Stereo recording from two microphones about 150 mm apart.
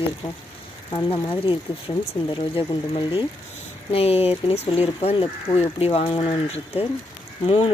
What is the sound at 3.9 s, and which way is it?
Speech, 40° left (ahead or behind).